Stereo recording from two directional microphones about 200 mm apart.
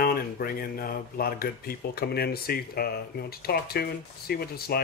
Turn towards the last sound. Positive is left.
turn(degrees=50)  # may be behind; listen again after turning